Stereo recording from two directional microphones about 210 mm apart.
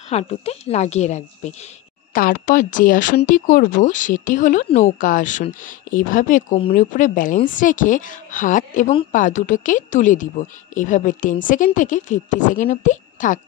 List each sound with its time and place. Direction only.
0.1 s speech: 30° left (ahead or behind)